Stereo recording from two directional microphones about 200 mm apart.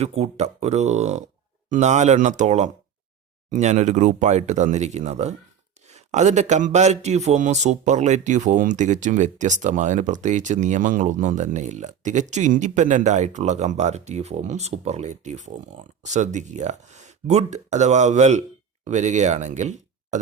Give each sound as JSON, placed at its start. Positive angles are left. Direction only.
{"t": 0.0, "sound": "a man's voice", "side_deg": -30}